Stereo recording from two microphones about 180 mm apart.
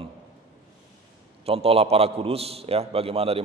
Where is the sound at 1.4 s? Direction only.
35° right (ahead or behind).